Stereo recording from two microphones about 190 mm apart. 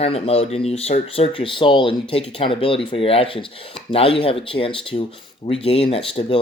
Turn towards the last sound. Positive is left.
turn(degrees=30)  # may be behind; listen again after turning